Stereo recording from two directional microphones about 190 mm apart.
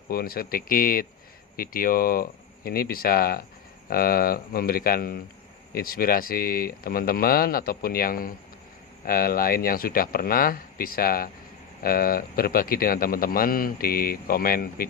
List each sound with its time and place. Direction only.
0.1 s a man's voice: 50° left (ahead or behind)